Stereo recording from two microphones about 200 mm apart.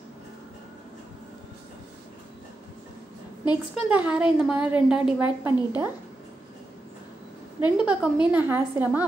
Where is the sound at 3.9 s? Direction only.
5° right (ahead or behind).